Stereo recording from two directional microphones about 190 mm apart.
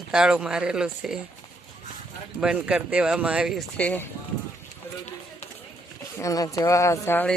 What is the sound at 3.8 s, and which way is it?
Speech, 10° left (ahead or behind).